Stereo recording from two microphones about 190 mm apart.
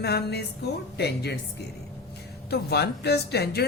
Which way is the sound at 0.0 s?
60° left (ahead or behind).